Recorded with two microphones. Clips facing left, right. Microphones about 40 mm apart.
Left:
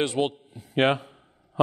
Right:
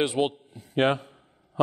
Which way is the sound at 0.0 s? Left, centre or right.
Centre.